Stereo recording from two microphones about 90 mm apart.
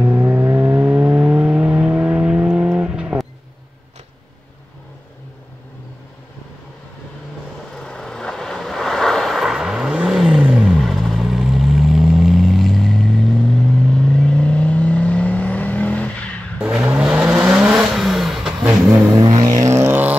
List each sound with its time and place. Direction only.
0.0 s vehicle: 15° right (ahead or behind)
7.7 s vehicle: 5° left (ahead or behind)
16.6 s vehicle: 25° right (ahead or behind)
16.9 s vehicle: 10° right (ahead or behind)
19.2 s music: 45° right (ahead or behind)